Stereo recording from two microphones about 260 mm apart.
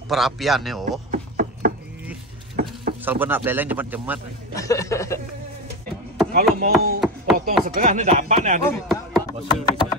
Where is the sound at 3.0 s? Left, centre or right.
Centre.